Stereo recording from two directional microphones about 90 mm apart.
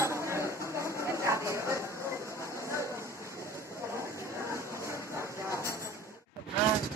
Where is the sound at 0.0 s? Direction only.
30° right (ahead or behind).